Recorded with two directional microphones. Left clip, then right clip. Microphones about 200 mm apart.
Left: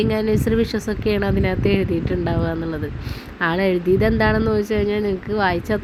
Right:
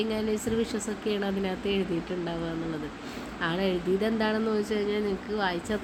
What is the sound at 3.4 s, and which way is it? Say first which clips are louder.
A woman's voice: left 10 dB; 30° left (ahead or behind).